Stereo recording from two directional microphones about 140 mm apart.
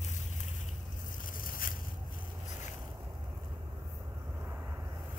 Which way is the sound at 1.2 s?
85° left.